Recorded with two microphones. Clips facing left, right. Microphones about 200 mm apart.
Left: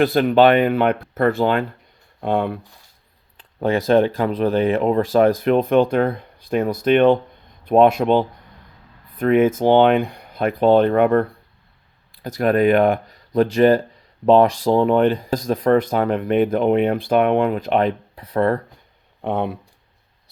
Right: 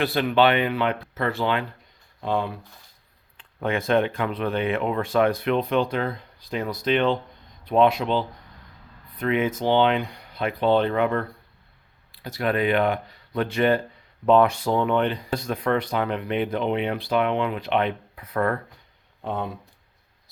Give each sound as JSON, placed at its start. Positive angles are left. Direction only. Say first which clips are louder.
{"t": 0.0, "sound": "speech", "louder": "left 6 dB", "side_deg": 45}
{"t": 2.2, "sound": "speech", "louder": "left 5 dB", "side_deg": 60}
{"t": 3.3, "sound": "speech", "louder": "left 6 dB", "side_deg": 35}
{"t": 19.2, "sound": "speech", "louder": "left 7 dB", "side_deg": 65}